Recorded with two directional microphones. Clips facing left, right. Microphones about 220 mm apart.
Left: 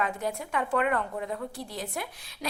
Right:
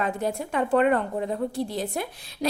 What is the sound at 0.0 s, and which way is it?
A woman's voice, 30° right (ahead or behind).